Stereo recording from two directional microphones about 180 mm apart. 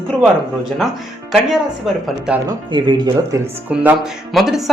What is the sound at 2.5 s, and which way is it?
Speech, 25° right (ahead or behind).